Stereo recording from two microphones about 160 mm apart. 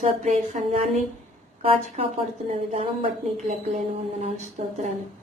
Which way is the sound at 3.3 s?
45° right (ahead or behind).